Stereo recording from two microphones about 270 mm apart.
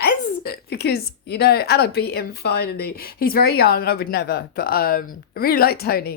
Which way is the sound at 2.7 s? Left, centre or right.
Left.